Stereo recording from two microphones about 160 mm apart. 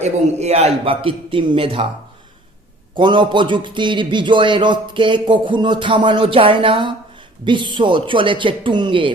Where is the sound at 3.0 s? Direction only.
30° right (ahead or behind).